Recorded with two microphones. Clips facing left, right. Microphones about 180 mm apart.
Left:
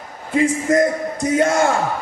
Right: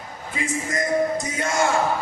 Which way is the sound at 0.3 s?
60° left (ahead or behind).